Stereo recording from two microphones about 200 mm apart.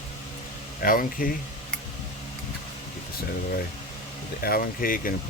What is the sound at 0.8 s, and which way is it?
Speech, 45° left (ahead or behind).